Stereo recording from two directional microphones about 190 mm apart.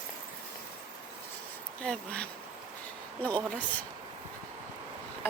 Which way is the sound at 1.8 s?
5° left (ahead or behind).